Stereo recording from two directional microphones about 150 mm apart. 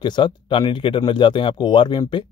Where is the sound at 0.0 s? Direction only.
30° left (ahead or behind).